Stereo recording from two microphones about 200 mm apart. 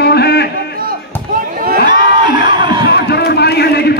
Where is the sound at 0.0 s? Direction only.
55° left (ahead or behind).